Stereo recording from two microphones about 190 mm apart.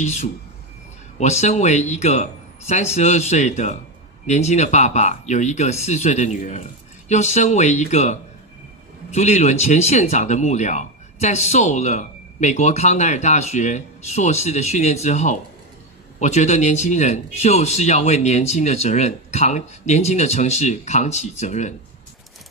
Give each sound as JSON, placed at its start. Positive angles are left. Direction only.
{"t": 0.0, "sound": "speech", "side_deg": 40}